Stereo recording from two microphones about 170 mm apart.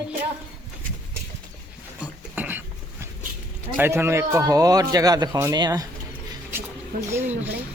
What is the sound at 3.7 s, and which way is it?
A man's voice, 15° right (ahead or behind).